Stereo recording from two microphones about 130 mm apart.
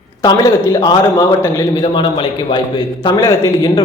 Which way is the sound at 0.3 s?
30° left (ahead or behind).